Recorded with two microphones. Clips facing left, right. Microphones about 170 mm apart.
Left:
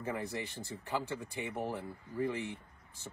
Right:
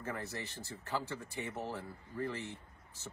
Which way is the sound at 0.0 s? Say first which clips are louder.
Left 4 dB; 15° left (ahead or behind).